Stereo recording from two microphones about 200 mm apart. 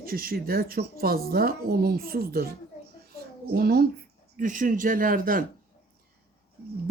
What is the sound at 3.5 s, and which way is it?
Speech, 50° right (ahead or behind).